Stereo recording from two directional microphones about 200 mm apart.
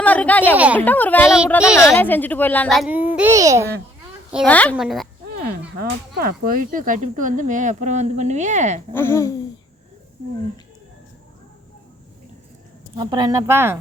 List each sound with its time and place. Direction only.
0.0 s speech: 10° left (ahead or behind)
0.5 s speech: 5° right (ahead or behind)
0.8 s speech: 10° left (ahead or behind)
1.6 s a woman's voice: 5° right (ahead or behind)
1.9 s speech: 10° left (ahead or behind)
3.2 s speech: 15° right (ahead or behind)
4.4 s speech: 5° left (ahead or behind)
5.8 s speech: 50° right (ahead or behind)
8.9 s speech: 10° left (ahead or behind)
13.0 s speech: 20° right (ahead or behind)